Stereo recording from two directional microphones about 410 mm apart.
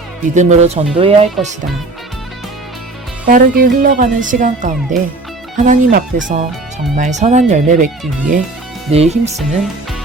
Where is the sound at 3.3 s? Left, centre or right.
Centre.